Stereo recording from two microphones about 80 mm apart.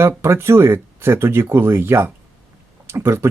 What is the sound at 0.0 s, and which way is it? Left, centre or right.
Speech, right.